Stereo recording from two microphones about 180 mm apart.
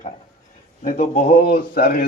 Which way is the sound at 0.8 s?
50° left (ahead or behind).